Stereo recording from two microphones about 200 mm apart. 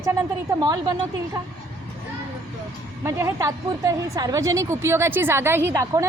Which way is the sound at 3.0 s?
15° right (ahead or behind).